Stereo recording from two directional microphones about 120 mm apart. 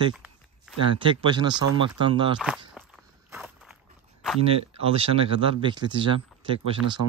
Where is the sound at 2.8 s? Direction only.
15° right (ahead or behind).